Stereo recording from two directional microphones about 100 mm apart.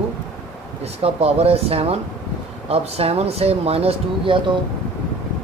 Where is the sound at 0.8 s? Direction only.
90° right; by 4.4 s 65° right (ahead or behind).